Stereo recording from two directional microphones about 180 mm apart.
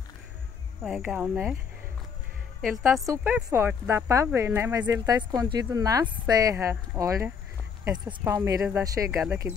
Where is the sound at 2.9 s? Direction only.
15° right (ahead or behind).